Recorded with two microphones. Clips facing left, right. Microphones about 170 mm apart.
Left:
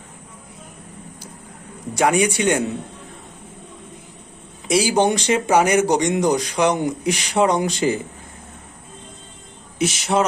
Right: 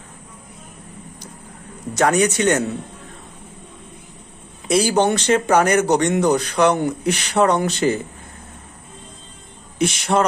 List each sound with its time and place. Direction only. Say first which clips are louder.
1.9 s speech: right 1 dB; 10° left (ahead or behind)
4.7 s speech: right 1 dB; 10° left (ahead or behind)
9.7 s speech: right 1 dB; 55° right (ahead or behind)